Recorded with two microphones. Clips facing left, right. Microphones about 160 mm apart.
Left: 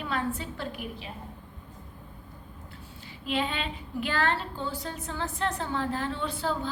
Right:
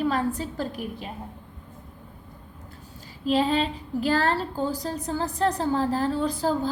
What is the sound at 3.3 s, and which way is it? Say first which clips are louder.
A woman's voice: right 8 dB; 35° right (ahead or behind).